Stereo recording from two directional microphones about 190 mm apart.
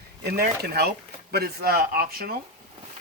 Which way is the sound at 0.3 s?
55° right (ahead or behind).